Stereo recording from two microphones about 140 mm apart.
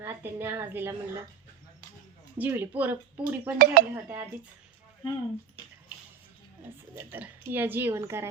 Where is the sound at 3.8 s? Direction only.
90° right.